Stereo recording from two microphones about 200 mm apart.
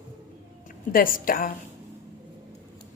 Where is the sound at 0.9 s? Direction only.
45° left (ahead or behind).